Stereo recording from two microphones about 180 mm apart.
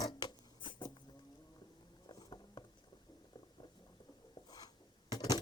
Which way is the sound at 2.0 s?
25° left (ahead or behind).